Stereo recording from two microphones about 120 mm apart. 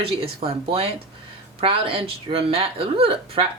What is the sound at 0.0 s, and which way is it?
Speech, 50° right (ahead or behind).